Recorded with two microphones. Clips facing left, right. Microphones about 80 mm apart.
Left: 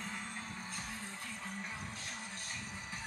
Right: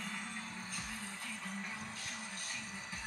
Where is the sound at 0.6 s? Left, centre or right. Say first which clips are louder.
Left 1 dB; left.